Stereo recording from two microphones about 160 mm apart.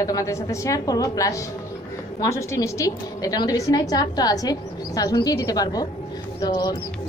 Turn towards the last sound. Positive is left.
turn(degrees=25)  # may be behind; listen again after turning